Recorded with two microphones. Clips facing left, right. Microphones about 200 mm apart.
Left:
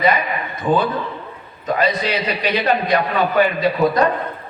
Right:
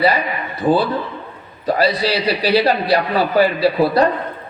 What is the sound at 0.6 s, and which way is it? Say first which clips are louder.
A man's voice: right 2 dB; 35° right (ahead or behind).